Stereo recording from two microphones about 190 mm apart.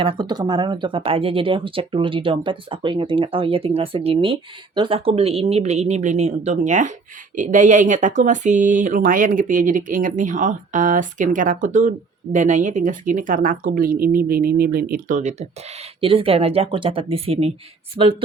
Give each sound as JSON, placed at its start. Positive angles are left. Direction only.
{"t": 0.0, "sound": "speech", "side_deg": -25}